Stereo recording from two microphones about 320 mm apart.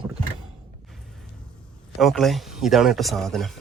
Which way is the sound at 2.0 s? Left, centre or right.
Centre.